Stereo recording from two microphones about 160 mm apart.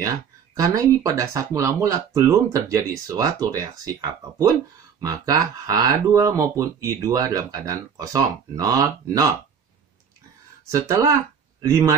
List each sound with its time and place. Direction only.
0.0 s speech: 20° right (ahead or behind)
10.7 s speech: 20° right (ahead or behind)